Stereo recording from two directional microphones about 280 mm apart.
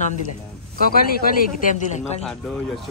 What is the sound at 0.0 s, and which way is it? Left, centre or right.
Speech, left.